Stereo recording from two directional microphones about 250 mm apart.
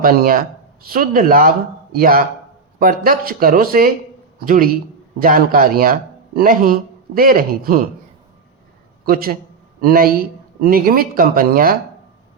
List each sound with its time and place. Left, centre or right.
0.0 s speech: right
9.0 s speech: right